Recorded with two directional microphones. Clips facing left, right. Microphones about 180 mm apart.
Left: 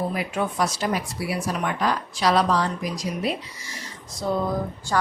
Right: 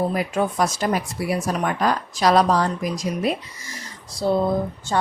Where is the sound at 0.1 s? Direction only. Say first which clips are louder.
Right 4 dB; 45° right (ahead or behind).